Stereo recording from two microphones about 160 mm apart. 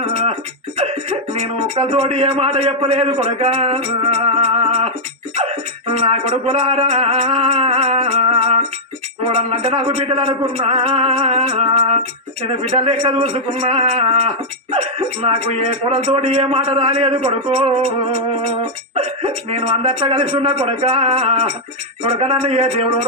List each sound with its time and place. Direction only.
0.0 s music: 40° right (ahead or behind)
1.7 s speech: 40° right (ahead or behind)
6.1 s speech: 40° right (ahead or behind)